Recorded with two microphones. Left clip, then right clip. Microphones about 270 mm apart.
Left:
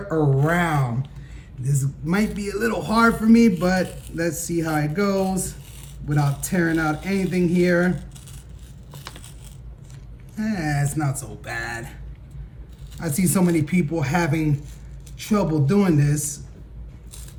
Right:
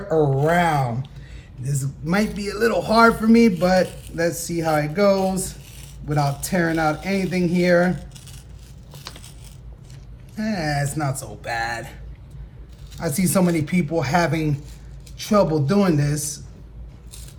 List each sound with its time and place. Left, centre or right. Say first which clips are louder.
0.1 s speech: right 3 dB; centre
8.9 s a sound: right 1 dB; centre
10.3 s speech: right 2 dB; centre
13.0 s speech: right 2 dB; centre
16.1 s a man's voice: even; centre